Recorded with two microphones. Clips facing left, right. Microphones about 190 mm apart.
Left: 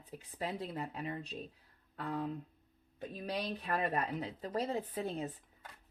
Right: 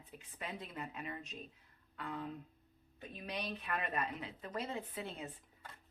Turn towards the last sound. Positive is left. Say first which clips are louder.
# left 7 dB
turn(degrees=40)  # may be behind; listen again after turning